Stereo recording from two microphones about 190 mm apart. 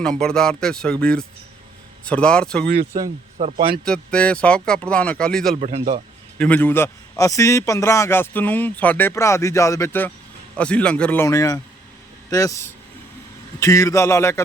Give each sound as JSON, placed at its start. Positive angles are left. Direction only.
{"t": 0.0, "sound": "speech", "side_deg": 5}
{"t": 3.3, "sound": "speech", "side_deg": -30}
{"t": 3.8, "sound": "speech", "side_deg": 5}
{"t": 5.5, "sound": "speech", "side_deg": -40}
{"t": 6.4, "sound": "a man's voice", "side_deg": 10}